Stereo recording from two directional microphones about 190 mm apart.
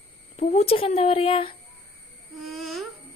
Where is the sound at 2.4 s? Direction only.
Centre (ahead or behind).